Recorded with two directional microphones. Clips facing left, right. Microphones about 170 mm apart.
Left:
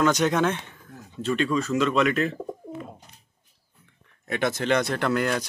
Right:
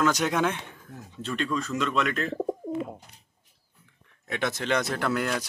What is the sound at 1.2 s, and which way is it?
Speech, centre (ahead or behind).